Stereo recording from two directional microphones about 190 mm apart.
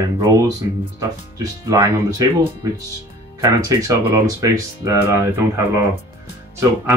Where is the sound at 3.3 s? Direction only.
20° right (ahead or behind).